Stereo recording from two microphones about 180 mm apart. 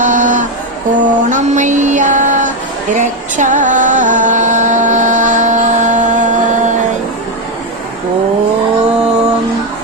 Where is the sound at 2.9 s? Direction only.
45° right (ahead or behind).